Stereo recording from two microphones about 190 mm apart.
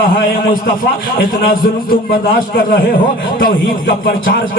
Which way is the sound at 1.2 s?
80° left.